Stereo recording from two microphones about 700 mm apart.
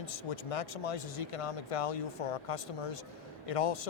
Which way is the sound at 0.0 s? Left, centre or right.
Left.